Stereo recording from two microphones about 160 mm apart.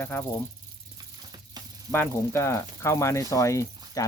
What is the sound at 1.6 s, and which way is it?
Snake, 25° right (ahead or behind).